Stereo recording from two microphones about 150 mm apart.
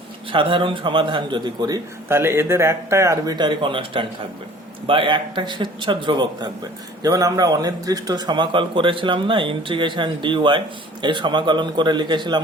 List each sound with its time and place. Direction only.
0.3 s a man's voice: 35° right (ahead or behind)